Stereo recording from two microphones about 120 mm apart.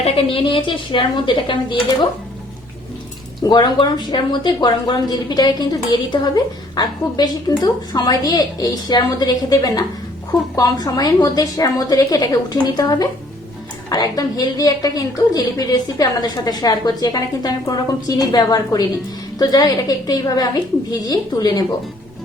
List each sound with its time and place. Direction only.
0.0 s speech: 45° left (ahead or behind)
3.4 s speech: 35° left (ahead or behind)